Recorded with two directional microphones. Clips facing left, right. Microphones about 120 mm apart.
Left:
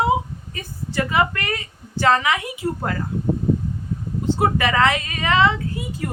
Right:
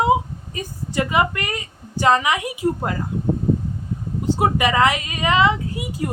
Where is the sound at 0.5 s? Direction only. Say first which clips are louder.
Right 1 dB; 15° right (ahead or behind).